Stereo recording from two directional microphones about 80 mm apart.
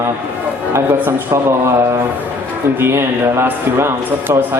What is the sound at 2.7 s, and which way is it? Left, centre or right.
Speech, right.